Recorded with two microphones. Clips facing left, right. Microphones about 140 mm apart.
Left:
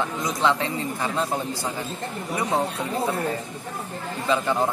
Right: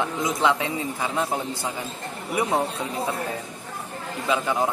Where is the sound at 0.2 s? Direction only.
20° right (ahead or behind).